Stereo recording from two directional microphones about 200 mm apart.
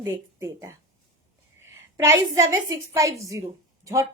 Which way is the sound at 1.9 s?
15° right (ahead or behind).